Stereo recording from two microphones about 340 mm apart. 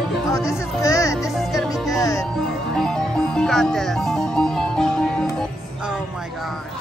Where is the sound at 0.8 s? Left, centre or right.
Centre.